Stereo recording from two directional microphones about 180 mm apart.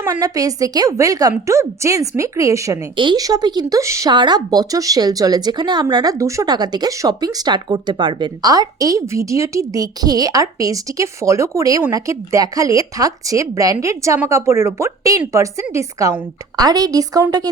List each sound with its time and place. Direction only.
0.0 s speech: 20° right (ahead or behind)